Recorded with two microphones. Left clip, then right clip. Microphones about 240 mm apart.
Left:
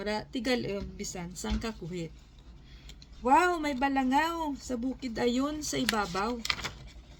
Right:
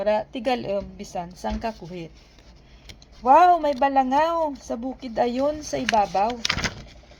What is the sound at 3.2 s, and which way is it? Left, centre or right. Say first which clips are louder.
A woman's voice: right 10 dB; centre.